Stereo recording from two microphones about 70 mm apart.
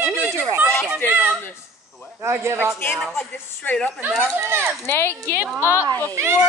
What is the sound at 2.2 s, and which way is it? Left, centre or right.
Speech, right.